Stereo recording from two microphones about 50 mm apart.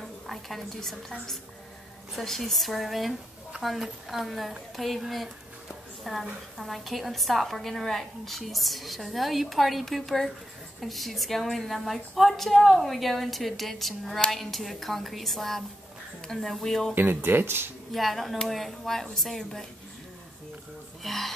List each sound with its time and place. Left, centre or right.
0.3 s a woman's voice: centre
2.1 s a woman's voice: centre
16.9 s speech: right
17.9 s a woman's voice: centre
21.0 s speech: centre